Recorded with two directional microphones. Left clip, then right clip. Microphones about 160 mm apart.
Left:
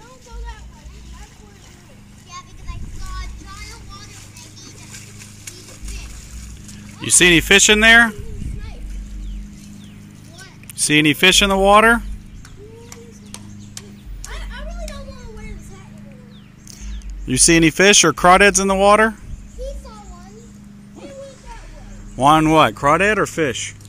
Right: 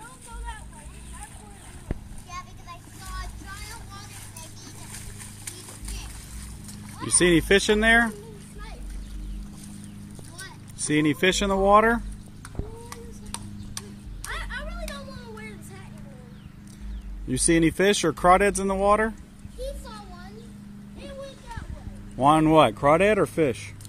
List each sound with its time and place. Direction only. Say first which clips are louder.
2.3 s vehicle: left 2 dB; 10° right (ahead or behind)
7.0 s speech: left 8 dB; 10° left (ahead or behind)
10.9 s speech: left 9 dB; 15° left (ahead or behind)
12.9 s music: left 1 dB; 5° right (ahead or behind)
17.3 s speech: left 8 dB; 20° left (ahead or behind)
22.1 s speech: left 5 dB; 10° left (ahead or behind); by 23.6 s 10° right (ahead or behind)